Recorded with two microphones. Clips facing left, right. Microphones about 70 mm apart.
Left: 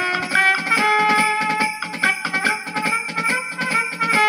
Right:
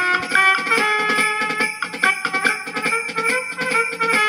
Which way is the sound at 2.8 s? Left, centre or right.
Left.